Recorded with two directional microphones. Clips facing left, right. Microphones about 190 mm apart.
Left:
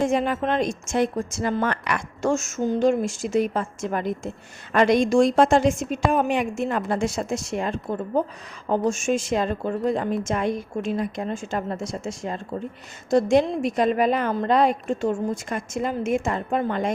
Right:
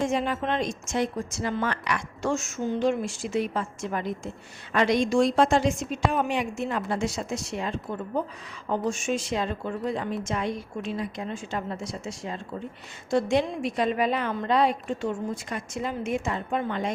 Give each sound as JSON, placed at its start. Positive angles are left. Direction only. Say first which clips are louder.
{"t": 0.0, "sound": "a woman's voice", "louder": "left 4 dB", "side_deg": 50}